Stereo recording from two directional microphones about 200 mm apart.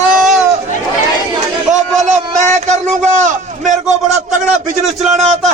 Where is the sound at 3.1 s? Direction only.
35° right (ahead or behind).